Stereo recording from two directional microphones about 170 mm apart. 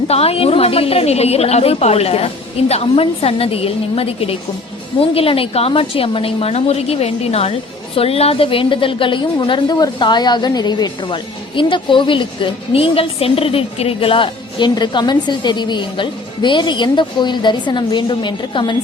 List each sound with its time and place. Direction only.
0.1 s a woman's voice: 35° left (ahead or behind)